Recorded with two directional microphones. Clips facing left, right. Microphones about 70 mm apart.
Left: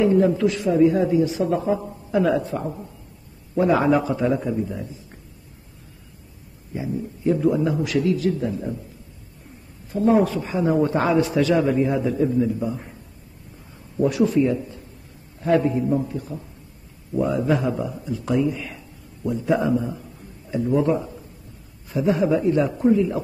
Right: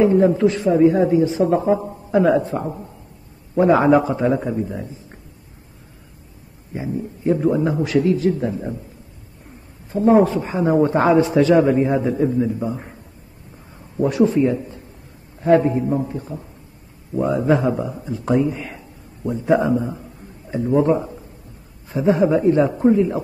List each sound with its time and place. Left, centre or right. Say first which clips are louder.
0.0 s a man's voice: right 3 dB; right
6.7 s a man's voice: right 2 dB; right
9.8 s a man's voice: right 4 dB; right
13.9 s a man's voice: right 2 dB; right